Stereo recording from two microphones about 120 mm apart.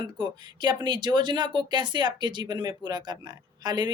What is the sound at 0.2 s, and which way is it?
Speech, 40° right (ahead or behind).